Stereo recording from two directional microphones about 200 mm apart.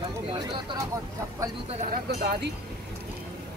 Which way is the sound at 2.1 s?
55° right (ahead or behind).